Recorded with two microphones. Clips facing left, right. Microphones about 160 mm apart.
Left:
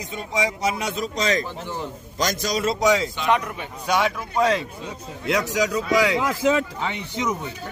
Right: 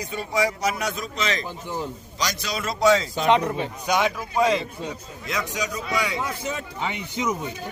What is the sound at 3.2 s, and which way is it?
Speech, 25° right (ahead or behind).